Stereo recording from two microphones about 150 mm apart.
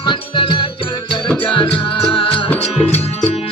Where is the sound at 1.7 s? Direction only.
35° left (ahead or behind).